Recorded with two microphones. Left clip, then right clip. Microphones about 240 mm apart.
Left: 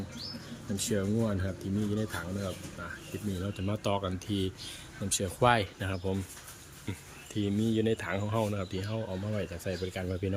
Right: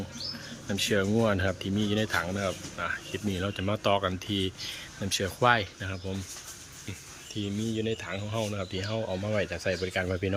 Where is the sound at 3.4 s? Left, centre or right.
Centre.